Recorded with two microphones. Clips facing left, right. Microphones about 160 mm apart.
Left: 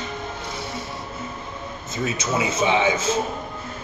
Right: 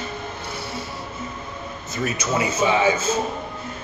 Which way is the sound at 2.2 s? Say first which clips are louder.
Right 1 dB; 25° left (ahead or behind).